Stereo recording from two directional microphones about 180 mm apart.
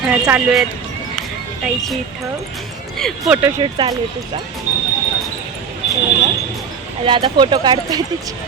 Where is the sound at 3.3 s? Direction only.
15° right (ahead or behind).